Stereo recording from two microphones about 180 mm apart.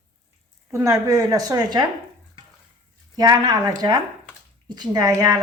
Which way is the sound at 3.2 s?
20° right (ahead or behind).